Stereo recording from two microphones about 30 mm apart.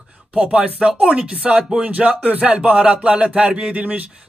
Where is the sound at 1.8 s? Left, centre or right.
Right.